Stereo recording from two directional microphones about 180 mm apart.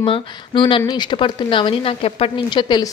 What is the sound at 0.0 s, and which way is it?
A woman's voice, 30° left (ahead or behind).